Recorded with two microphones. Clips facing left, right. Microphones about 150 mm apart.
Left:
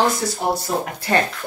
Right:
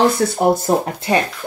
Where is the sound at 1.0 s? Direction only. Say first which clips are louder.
Right 1 dB; 20° right (ahead or behind).